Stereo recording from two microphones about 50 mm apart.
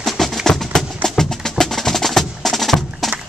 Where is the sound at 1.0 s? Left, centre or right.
Centre.